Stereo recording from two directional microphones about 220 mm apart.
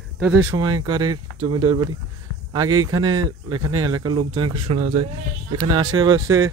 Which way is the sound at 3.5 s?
80° right.